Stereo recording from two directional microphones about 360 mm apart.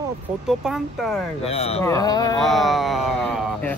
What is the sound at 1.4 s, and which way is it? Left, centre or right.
Speech, centre.